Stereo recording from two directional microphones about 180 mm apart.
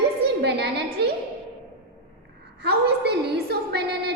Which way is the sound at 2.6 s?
65° right (ahead or behind).